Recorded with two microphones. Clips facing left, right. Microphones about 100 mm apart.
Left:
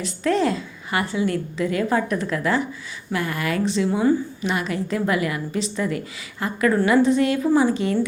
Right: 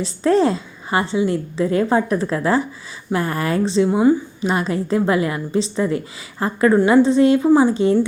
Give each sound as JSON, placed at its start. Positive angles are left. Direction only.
{"t": 0.0, "sound": "a woman's voice", "side_deg": -30}